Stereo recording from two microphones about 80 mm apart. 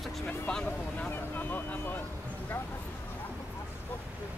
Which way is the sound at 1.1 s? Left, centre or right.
Left.